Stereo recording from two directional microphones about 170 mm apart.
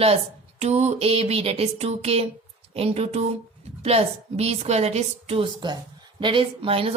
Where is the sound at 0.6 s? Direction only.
40° right (ahead or behind).